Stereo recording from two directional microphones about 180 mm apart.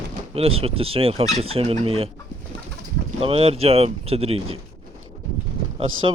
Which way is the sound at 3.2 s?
30° right (ahead or behind).